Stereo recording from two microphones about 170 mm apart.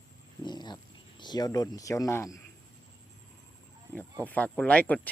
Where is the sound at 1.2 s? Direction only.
25° left (ahead or behind).